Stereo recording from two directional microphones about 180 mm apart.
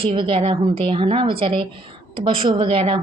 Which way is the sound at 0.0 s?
30° right (ahead or behind).